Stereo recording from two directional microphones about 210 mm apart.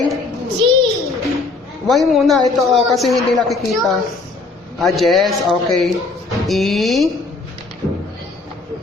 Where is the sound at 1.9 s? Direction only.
Centre (ahead or behind).